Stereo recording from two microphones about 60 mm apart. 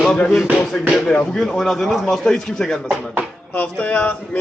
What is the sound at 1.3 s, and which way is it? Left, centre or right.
A man's voice, centre.